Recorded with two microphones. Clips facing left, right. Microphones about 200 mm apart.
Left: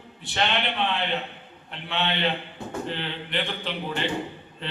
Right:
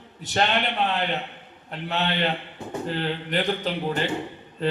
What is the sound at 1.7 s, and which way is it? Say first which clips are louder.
A man's voice: right 2 dB; 40° right (ahead or behind).